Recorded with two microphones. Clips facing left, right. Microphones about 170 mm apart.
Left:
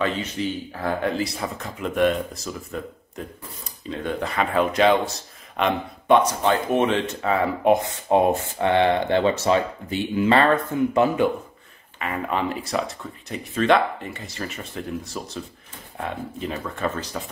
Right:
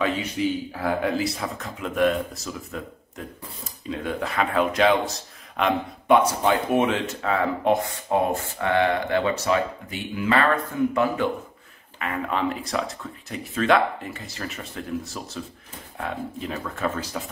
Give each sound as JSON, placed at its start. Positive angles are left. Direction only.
{"t": 0.0, "sound": "speech", "side_deg": -10}
{"t": 7.8, "sound": "speech", "side_deg": 20}
{"t": 12.0, "sound": "speech", "side_deg": 0}